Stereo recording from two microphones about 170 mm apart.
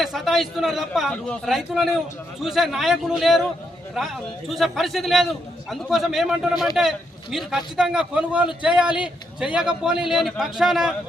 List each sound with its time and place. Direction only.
0.0 s a man's voice: centre (ahead or behind)